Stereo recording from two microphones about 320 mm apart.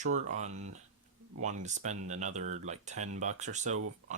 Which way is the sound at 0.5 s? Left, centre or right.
Right.